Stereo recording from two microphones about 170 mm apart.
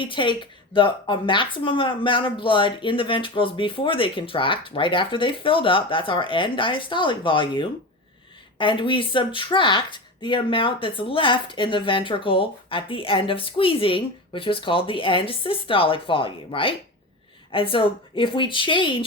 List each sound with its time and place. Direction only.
0.0 s speech: 30° left (ahead or behind)